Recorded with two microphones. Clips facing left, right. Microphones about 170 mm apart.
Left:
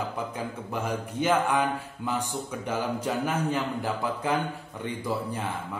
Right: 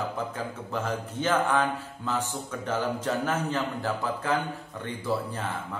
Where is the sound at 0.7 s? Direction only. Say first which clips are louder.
Left 1 dB; 10° left (ahead or behind).